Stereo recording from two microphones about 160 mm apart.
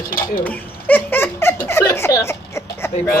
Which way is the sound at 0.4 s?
10° left (ahead or behind).